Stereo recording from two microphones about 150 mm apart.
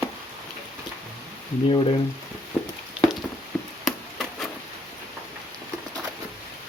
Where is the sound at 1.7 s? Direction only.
35° left (ahead or behind).